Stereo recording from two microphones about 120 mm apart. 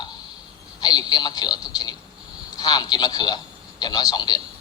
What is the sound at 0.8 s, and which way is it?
A man's voice, 35° left (ahead or behind).